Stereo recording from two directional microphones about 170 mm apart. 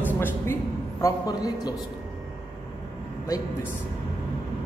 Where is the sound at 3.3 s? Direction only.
20° left (ahead or behind).